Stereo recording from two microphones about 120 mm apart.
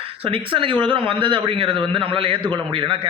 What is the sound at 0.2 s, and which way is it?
A man's voice, 45° right (ahead or behind).